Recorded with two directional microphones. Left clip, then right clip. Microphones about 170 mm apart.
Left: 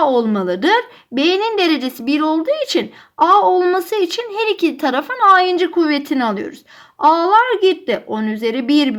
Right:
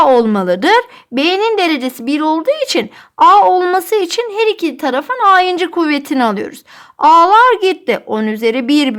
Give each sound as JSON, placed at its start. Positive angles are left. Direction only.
{"t": 0.0, "sound": "a woman's voice", "side_deg": -40}